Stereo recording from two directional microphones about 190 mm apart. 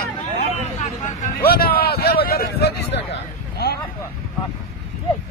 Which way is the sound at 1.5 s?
55° left (ahead or behind).